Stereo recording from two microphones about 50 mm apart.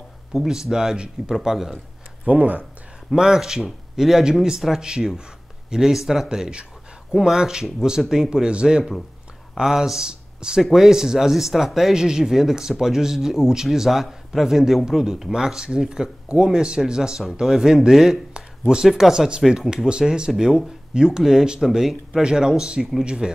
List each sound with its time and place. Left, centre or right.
0.3 s speech: centre
2.2 s speech: right
3.2 s speech: centre